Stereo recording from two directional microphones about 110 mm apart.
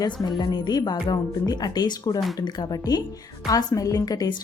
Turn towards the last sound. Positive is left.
turn(degrees=35)  # may be behind; listen again after turning